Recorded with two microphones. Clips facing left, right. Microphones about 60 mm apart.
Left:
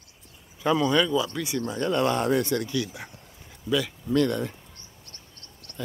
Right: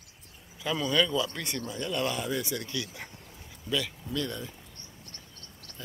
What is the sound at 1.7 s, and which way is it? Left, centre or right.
Speech, left.